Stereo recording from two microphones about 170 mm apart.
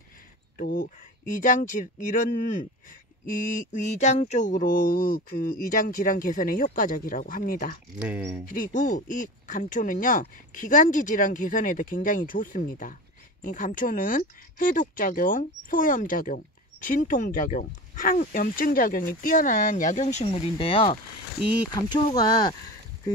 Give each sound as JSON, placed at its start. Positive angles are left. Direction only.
{"t": 0.6, "sound": "speech", "side_deg": 55}
{"t": 3.3, "sound": "mantra", "side_deg": 50}
{"t": 8.0, "sound": "speech", "side_deg": -5}
{"t": 8.5, "sound": "speech", "side_deg": 55}